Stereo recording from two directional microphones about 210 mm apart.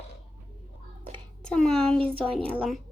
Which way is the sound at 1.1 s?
5° left (ahead or behind).